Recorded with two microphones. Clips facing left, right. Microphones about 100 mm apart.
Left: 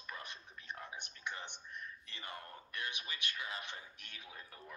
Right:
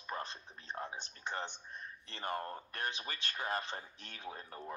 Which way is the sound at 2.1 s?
45° right (ahead or behind).